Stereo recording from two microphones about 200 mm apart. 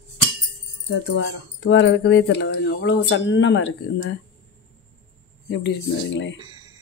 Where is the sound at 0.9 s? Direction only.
65° left (ahead or behind).